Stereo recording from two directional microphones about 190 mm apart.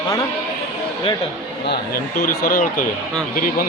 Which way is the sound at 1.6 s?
50° left (ahead or behind).